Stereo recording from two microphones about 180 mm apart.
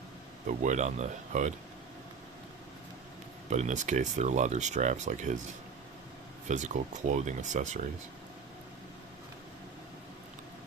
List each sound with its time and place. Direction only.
0.4 s speech: 40° right (ahead or behind)
3.5 s speech: 40° right (ahead or behind)
6.5 s speech: 40° right (ahead or behind)